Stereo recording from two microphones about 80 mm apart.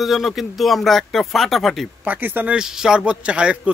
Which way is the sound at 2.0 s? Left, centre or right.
Right.